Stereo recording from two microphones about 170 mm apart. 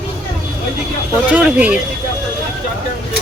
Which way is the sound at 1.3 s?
10° right (ahead or behind).